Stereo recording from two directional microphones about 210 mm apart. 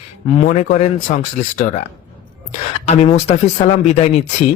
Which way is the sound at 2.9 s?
30° left (ahead or behind).